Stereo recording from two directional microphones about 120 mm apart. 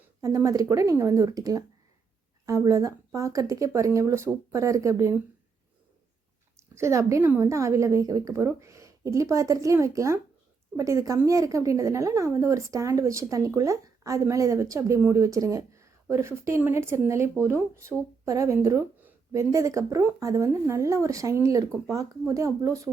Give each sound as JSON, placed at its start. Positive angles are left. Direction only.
{"t": 0.2, "sound": "a woman's voice", "side_deg": -30}
{"t": 6.6, "sound": "a woman's voice", "side_deg": -25}